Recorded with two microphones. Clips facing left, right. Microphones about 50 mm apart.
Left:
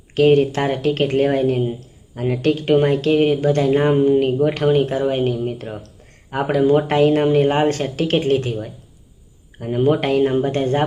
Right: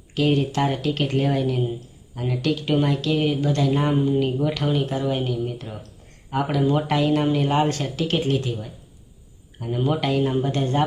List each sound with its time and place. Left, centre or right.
0.1 s speech: left